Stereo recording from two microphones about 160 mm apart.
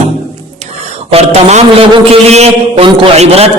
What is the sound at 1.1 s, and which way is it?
A man's voice, 40° right (ahead or behind).